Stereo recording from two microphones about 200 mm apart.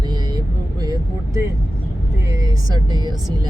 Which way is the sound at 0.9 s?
15° right (ahead or behind).